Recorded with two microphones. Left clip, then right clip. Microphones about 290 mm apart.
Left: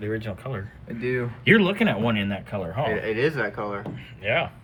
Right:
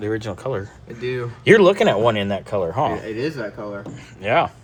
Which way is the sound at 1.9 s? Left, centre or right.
Right.